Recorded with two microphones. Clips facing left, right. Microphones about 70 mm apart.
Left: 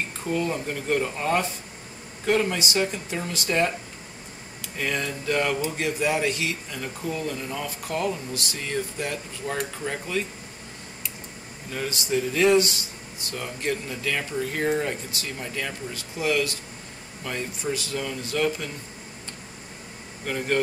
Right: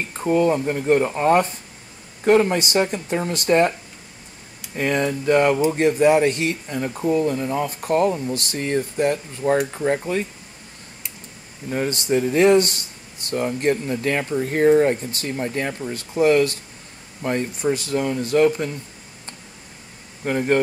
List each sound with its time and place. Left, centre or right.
0.2 s speech: right
4.6 s speech: right
5.8 s speech: right
6.8 s speech: right
11.9 s speech: right
20.2 s speech: right